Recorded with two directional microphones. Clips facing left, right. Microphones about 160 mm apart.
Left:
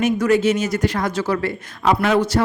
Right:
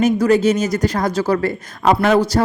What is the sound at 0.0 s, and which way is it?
Speech, 40° right (ahead or behind).